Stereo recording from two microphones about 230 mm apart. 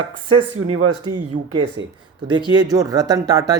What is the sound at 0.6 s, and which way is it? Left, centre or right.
Speech, right.